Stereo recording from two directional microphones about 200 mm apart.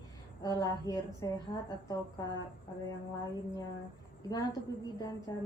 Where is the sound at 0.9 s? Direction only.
15° left (ahead or behind).